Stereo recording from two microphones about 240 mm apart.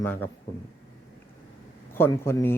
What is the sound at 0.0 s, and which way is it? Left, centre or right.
Speech, centre.